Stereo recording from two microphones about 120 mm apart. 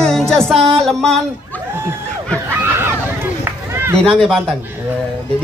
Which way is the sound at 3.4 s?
20° right (ahead or behind).